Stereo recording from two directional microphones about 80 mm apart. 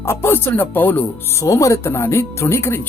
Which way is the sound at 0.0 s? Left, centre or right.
Left.